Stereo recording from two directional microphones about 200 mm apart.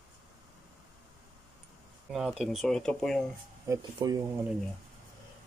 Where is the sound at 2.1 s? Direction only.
Centre (ahead or behind).